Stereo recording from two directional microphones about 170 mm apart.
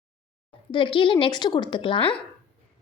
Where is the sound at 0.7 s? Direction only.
30° left (ahead or behind).